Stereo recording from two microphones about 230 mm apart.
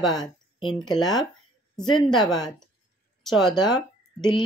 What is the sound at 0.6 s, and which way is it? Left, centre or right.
Speech, left.